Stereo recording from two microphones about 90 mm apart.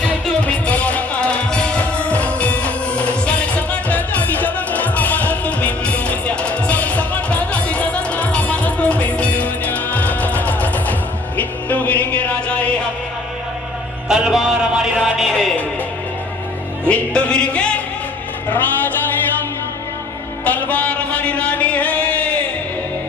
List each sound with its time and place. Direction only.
0.0 s music: 15° left (ahead or behind)
14.1 s music: 5° right (ahead or behind)
16.8 s music: 10° left (ahead or behind)
20.4 s music: 15° left (ahead or behind)